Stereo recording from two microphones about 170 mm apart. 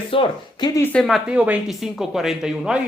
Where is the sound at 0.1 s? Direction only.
30° left (ahead or behind).